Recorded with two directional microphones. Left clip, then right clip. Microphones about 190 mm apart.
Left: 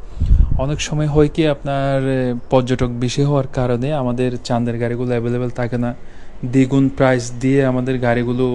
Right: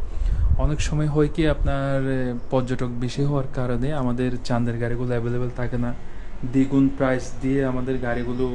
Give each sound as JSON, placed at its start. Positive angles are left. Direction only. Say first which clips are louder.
{"t": 0.6, "sound": "speech", "louder": "left 6 dB", "side_deg": 30}